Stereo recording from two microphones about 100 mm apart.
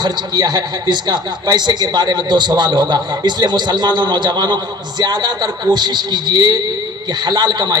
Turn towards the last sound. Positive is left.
turn(degrees=-45)  # may be behind; listen again after turning